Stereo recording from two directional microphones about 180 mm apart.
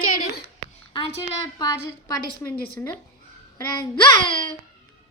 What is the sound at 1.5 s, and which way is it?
Speech, 20° left (ahead or behind).